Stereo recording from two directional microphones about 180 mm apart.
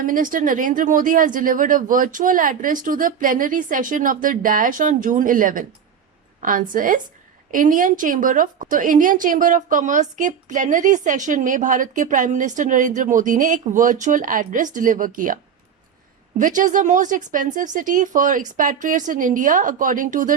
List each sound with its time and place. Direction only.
0.0 s a woman's voice: 50° right (ahead or behind)
16.4 s a woman's voice: 45° right (ahead or behind)